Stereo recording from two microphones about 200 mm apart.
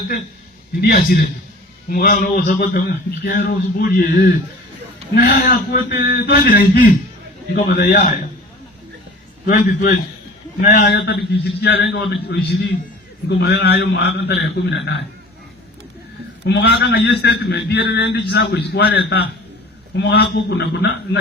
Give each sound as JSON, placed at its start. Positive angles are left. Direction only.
{"t": 0.8, "sound": "a man's voice", "side_deg": 50}
{"t": 9.5, "sound": "a man's voice", "side_deg": 40}
{"t": 16.5, "sound": "a man's voice", "side_deg": 55}